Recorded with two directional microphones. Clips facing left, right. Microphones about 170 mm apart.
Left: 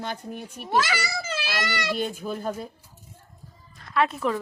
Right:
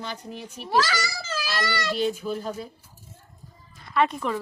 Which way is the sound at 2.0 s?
50° left (ahead or behind).